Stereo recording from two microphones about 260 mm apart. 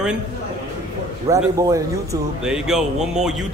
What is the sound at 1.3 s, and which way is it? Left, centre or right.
A man's voice, centre.